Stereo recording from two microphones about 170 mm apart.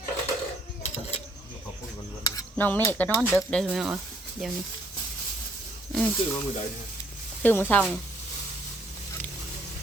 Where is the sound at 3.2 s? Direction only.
Centre (ahead or behind).